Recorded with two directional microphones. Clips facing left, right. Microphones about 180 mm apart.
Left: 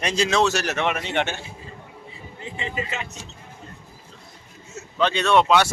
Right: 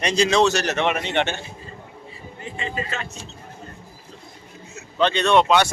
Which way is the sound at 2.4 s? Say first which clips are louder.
Right 1 dB; 20° left (ahead or behind).